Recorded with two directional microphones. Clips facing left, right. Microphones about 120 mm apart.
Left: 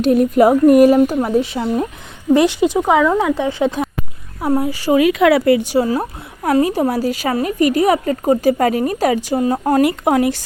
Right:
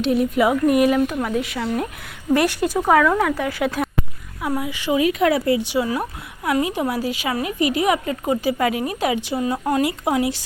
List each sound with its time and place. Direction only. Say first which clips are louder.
0.0 s a sound: left 6 dB; 45° left (ahead or behind)
0.9 s speech: left 6 dB; 30° left (ahead or behind)
4.4 s speech: left 7 dB; 35° left (ahead or behind)
4.9 s speech: left 6 dB; 90° left; by 5.6 s 75° left (ahead or behind)
5.6 s a woman's voice: left 5 dB; 40° left (ahead or behind)
9.8 s a sound: left 6 dB; 55° left (ahead or behind)